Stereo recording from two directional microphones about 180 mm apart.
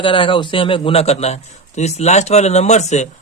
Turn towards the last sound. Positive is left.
turn(degrees=40)  # may be behind; listen again after turning